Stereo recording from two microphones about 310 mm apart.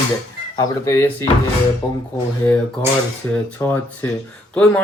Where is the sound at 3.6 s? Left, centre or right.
Centre.